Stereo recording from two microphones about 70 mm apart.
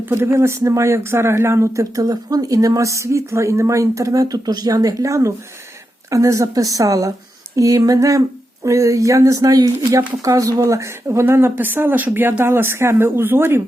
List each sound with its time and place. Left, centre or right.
0.0 s speech: right